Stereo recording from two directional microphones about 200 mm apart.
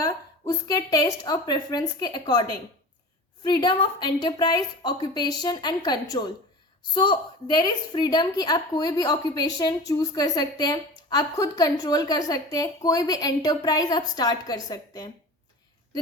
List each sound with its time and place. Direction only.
0.0 s a woman's voice: 15° left (ahead or behind)